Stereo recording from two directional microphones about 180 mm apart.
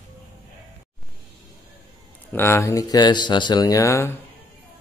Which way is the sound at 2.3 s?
15° left (ahead or behind).